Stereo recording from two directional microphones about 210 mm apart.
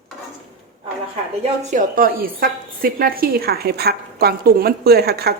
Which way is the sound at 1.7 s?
45° right (ahead or behind).